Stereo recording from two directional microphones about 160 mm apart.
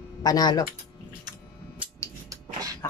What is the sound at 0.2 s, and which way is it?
Speech, 25° left (ahead or behind).